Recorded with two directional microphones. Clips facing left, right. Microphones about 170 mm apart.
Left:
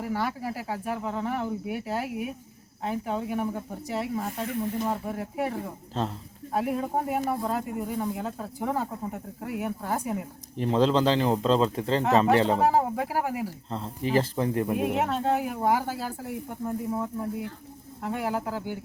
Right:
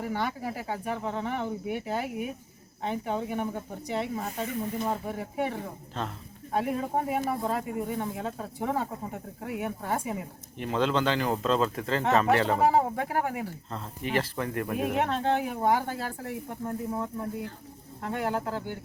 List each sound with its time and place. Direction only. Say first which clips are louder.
0.0 s speech: left 1 dB; 5° left (ahead or behind)
10.6 s speech: left 4 dB; 30° left (ahead or behind)
12.5 s speech: even; centre (ahead or behind)
13.7 s speech: left 4 dB; 25° left (ahead or behind)
14.7 s speech: left 2 dB; centre (ahead or behind)